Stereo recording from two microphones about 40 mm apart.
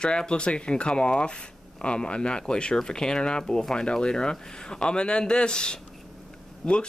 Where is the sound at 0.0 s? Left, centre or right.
Left.